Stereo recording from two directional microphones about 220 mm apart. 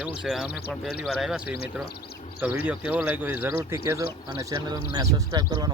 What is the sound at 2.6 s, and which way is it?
Speech, 5° right (ahead or behind).